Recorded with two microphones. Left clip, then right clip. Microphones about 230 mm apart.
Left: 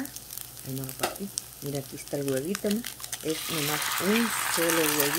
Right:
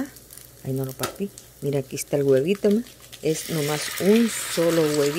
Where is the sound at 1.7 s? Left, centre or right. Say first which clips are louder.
Right 9 dB; right.